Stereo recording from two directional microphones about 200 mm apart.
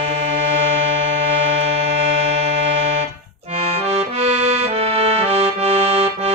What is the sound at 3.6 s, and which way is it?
Accordion, 30° right (ahead or behind).